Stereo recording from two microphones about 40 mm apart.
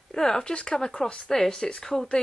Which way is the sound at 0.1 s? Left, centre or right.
Centre.